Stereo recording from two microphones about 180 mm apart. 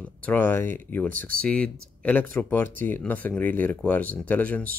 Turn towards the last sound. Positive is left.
turn(degrees=10)  # may be behind; listen again after turning